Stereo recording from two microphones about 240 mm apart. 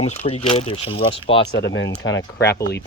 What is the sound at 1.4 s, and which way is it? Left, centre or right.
Speech, left.